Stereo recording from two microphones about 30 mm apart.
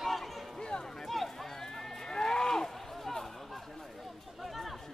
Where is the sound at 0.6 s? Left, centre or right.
Left.